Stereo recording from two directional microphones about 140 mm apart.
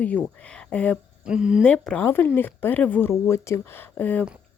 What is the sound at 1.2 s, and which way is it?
Speech, 5° right (ahead or behind).